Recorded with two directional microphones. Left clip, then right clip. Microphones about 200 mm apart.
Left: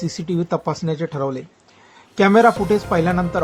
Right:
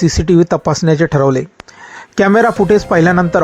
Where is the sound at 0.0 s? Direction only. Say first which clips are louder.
Right 13 dB; 40° right (ahead or behind).